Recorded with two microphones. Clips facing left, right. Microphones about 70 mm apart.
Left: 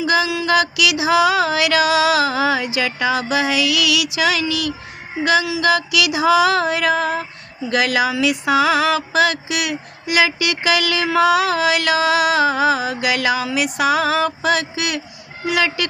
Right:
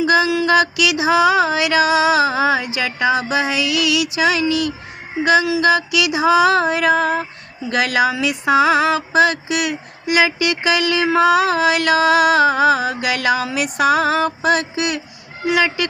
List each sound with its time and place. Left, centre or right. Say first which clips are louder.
0.0 s mantra: right 3 dB; right
15.4 s speech: right 2 dB; right